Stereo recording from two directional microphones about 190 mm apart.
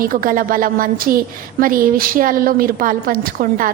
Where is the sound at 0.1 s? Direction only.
45° right (ahead or behind).